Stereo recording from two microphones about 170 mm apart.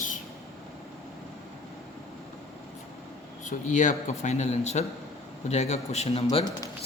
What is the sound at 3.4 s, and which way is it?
A man's voice, 45° left (ahead or behind).